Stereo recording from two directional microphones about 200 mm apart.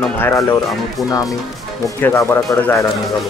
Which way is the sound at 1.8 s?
15° left (ahead or behind).